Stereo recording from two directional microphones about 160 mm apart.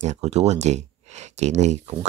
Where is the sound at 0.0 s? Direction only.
45° right (ahead or behind).